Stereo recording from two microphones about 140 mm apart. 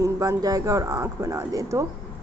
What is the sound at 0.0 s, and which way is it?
Speech, 25° right (ahead or behind).